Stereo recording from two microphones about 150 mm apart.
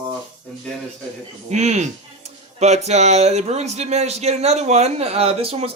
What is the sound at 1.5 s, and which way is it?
Speech, 50° right (ahead or behind).